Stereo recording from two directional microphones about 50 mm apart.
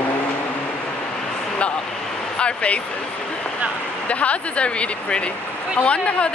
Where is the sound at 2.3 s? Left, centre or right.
Left.